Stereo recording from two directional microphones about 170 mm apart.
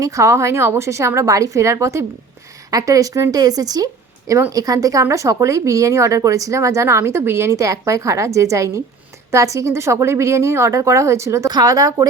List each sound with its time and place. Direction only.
0.0 s speech: 20° right (ahead or behind)